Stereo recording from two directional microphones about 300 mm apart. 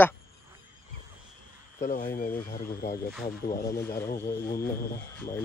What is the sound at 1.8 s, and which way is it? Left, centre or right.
Speech, left.